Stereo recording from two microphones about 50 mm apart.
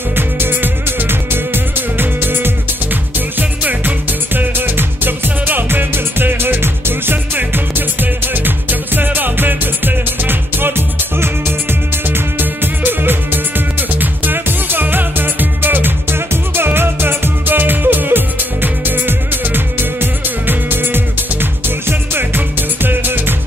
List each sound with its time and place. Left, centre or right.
0.1 s music: right
12.1 s music: right